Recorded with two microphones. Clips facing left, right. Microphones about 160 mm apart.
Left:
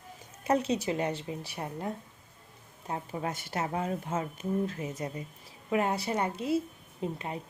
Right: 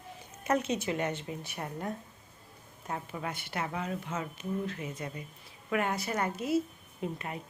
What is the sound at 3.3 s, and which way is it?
Speech, 40° left (ahead or behind).